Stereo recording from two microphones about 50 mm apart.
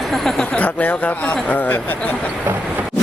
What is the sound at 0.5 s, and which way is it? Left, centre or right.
Speech, left.